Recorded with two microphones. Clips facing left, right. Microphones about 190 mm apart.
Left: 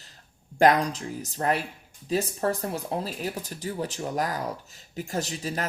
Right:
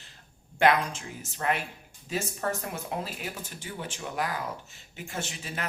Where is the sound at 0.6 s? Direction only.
40° left (ahead or behind).